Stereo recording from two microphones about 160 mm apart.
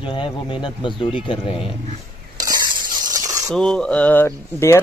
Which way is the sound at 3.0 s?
20° right (ahead or behind).